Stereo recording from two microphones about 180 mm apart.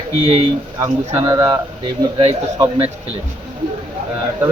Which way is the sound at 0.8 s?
20° right (ahead or behind).